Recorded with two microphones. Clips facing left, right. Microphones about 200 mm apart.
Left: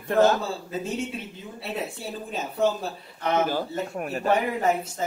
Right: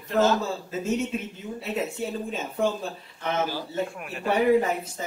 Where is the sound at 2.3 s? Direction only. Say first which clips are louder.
Left 4 dB; 35° left (ahead or behind).